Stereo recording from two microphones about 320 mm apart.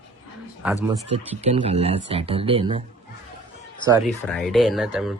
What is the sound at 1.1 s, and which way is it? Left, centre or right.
Speech, centre.